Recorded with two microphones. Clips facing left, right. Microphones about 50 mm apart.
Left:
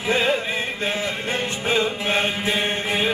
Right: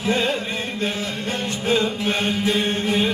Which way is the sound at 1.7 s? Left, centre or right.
Left.